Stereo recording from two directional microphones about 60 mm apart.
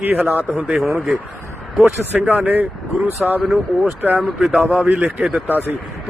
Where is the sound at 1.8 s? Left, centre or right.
Right.